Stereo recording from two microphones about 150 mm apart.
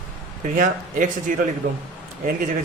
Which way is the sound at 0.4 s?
65° right (ahead or behind).